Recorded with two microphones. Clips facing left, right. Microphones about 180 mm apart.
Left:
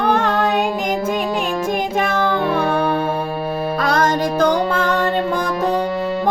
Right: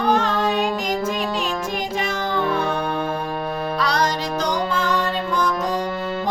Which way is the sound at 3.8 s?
50° left (ahead or behind).